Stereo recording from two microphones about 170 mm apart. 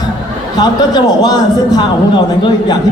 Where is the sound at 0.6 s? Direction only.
25° left (ahead or behind).